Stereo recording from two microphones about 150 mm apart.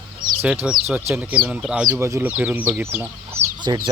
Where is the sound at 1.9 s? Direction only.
20° right (ahead or behind).